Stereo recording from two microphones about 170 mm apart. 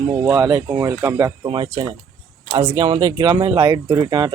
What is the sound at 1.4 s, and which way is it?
A man's voice, 30° right (ahead or behind).